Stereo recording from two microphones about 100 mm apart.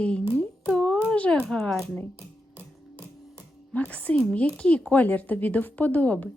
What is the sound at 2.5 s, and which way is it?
Music, 20° right (ahead or behind).